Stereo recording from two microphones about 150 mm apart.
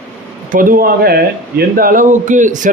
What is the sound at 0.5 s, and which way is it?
Speech, 65° right (ahead or behind).